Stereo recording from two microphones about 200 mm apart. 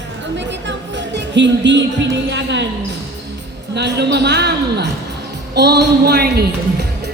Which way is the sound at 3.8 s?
55° right (ahead or behind).